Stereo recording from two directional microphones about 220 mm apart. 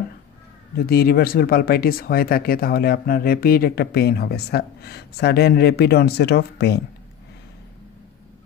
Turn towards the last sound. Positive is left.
turn(degrees=50)  # may be behind; listen again after turning